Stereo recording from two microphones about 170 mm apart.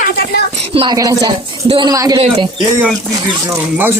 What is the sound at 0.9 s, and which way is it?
Speech, 20° right (ahead or behind).